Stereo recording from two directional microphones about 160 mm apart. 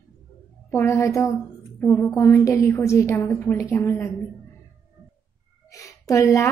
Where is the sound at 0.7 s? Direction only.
15° left (ahead or behind).